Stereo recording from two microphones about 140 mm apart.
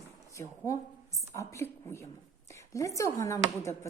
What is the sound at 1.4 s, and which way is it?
Speech, 20° left (ahead or behind).